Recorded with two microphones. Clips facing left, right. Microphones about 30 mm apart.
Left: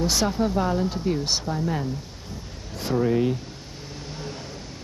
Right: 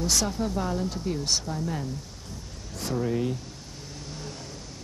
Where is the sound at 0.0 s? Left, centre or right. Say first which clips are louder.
Left 4 dB; left.